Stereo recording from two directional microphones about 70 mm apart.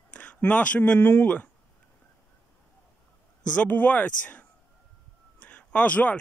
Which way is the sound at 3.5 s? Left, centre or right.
Left.